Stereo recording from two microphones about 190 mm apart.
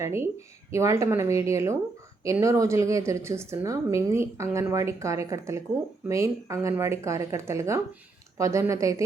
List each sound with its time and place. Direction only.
0.0 s speech: 15° right (ahead or behind)